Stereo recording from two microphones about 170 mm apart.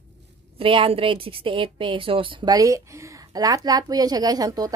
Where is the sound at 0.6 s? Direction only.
30° right (ahead or behind).